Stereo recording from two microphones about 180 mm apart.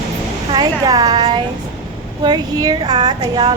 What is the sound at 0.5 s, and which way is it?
A woman's voice, 20° right (ahead or behind).